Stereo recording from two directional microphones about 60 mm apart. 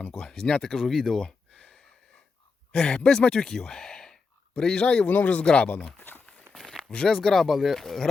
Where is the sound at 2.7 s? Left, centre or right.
Centre.